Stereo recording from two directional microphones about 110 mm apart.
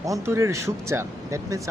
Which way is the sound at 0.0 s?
30° right (ahead or behind).